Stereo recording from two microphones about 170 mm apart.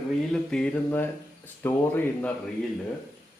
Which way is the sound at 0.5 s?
10° left (ahead or behind).